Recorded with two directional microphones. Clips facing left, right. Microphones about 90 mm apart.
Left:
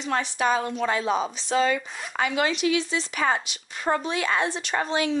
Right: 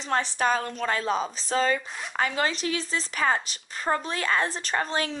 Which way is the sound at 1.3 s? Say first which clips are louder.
Left 2 dB; 40° right (ahead or behind).